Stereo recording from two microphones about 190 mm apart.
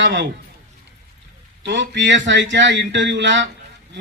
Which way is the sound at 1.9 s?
70° right (ahead or behind).